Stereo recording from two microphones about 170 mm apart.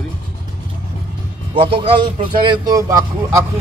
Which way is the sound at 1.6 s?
30° right (ahead or behind).